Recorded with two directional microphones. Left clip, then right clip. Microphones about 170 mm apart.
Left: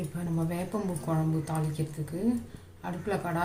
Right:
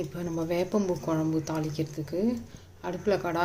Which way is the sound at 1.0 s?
50° right (ahead or behind).